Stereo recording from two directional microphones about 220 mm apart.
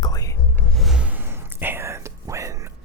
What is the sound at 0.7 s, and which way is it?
Whispering, centre (ahead or behind).